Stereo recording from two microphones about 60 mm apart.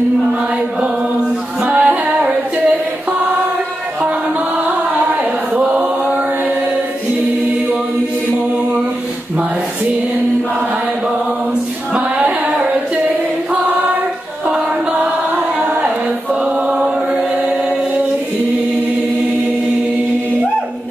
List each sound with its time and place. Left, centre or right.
1.6 s music: right
4.6 s chant: right
11.9 s singing: right
15.6 s a sound: right
16.4 s chant: centre